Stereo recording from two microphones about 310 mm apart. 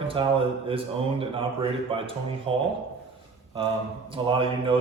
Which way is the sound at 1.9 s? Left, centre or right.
Centre.